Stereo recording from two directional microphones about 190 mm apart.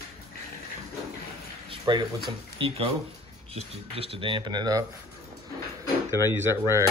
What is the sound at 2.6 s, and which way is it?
Speech, 30° right (ahead or behind).